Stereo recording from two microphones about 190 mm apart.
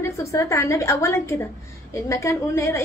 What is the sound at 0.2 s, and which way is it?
A woman's voice, 15° left (ahead or behind).